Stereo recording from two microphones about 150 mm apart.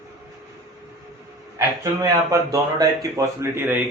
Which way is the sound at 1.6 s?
20° right (ahead or behind).